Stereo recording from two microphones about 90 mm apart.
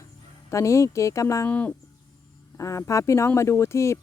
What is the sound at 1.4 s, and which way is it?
Speech, 15° left (ahead or behind).